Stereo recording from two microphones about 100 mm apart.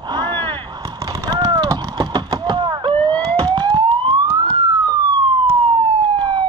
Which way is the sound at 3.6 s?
50° right (ahead or behind).